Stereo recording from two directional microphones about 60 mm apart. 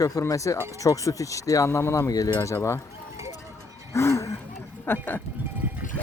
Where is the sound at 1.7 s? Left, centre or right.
Left.